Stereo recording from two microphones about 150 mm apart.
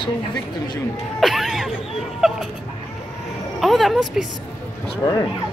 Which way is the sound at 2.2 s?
5° right (ahead or behind).